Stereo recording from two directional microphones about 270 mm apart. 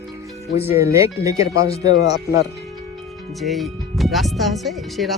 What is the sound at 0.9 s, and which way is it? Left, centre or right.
Speech, centre.